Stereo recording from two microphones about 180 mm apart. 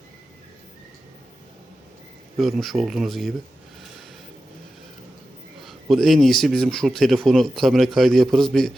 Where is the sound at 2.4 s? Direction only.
Centre (ahead or behind).